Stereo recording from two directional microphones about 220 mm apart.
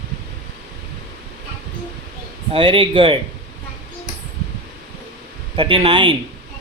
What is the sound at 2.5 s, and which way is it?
Speech, 25° right (ahead or behind).